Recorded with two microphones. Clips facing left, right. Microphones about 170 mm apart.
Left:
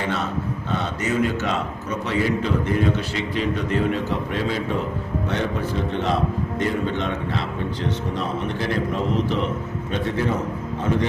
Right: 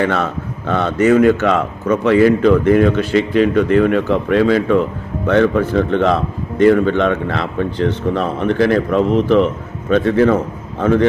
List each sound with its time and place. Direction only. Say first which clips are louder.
0.0 s a man's voice: right 7 dB; 60° right (ahead or behind); by 4.8 s 80° right
5.3 s a man's voice: right 13 dB; 65° right (ahead or behind)